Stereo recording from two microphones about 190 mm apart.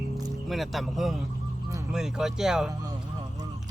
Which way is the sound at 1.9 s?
5° right (ahead or behind).